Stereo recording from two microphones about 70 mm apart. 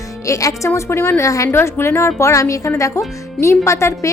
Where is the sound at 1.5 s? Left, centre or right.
Left.